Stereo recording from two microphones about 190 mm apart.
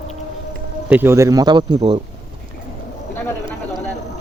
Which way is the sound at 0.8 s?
10° right (ahead or behind).